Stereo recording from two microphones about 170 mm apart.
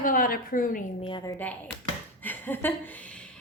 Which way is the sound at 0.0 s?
55° left (ahead or behind).